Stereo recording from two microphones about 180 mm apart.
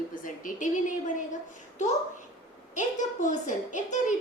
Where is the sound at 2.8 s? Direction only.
40° left (ahead or behind).